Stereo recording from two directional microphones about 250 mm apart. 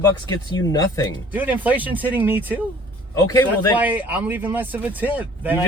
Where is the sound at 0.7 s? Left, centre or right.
Centre.